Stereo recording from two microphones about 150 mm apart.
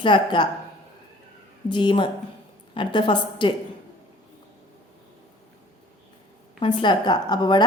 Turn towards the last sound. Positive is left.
turn(degrees=30)  # may be behind; listen again after turning